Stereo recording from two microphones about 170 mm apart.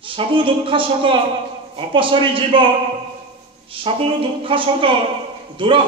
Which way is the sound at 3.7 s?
30° right (ahead or behind).